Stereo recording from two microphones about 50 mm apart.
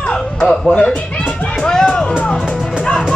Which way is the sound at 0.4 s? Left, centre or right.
Centre.